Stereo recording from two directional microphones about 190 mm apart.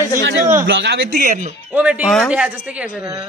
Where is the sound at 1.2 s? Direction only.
40° right (ahead or behind).